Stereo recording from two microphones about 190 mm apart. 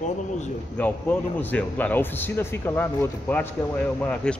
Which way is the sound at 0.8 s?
10° left (ahead or behind).